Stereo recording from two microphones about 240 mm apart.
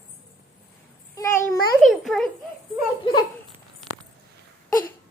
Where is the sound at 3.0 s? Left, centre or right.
Centre.